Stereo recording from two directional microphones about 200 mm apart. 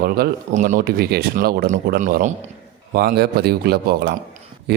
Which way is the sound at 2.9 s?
50° right (ahead or behind).